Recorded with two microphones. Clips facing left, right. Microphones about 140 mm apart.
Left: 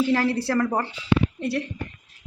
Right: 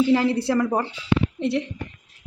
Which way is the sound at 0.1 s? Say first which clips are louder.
Right 3 dB; 20° right (ahead or behind).